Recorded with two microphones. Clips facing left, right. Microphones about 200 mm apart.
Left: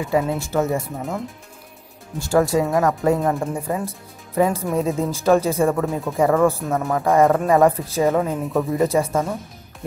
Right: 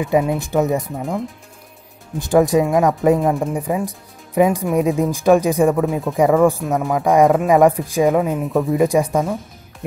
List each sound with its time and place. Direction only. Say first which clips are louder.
0.0 s speech: right 3 dB; 20° right (ahead or behind)
2.1 s speech: right 4 dB; 15° right (ahead or behind)
3.2 s speech: right 3 dB; 5° right (ahead or behind)
8.5 s speech: right 3 dB; centre (ahead or behind)
8.7 s speech: right 3 dB; 15° right (ahead or behind)